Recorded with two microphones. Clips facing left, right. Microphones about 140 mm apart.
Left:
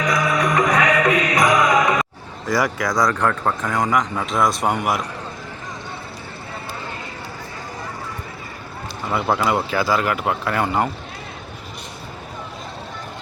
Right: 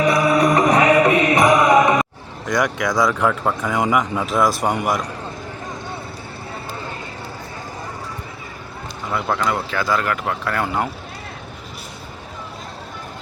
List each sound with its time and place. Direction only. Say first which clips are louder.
0.0 s music: right 4 dB; 30° right (ahead or behind)
2.5 s a man's voice: right 1 dB; centre (ahead or behind)
9.0 s speech: left 2 dB; 10° left (ahead or behind)